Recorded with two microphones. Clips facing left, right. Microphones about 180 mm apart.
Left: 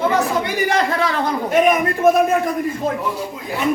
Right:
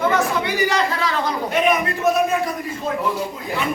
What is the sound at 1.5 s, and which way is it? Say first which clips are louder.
Speech: left 4 dB; 45° left (ahead or behind).